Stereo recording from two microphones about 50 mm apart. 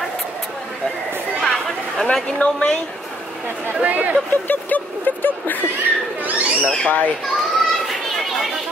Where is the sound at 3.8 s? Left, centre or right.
Right.